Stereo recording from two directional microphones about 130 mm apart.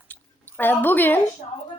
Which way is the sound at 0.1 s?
15° left (ahead or behind).